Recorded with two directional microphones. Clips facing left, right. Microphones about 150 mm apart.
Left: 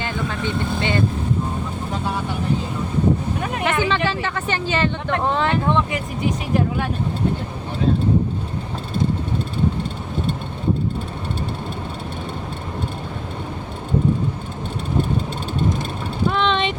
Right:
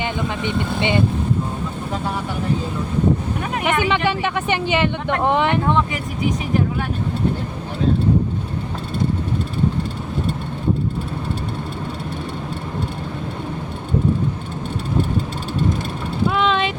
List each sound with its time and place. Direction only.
0.0 s speech: 20° right (ahead or behind)
3.6 s speech: 15° right (ahead or behind)
16.3 s vehicle: 5° right (ahead or behind)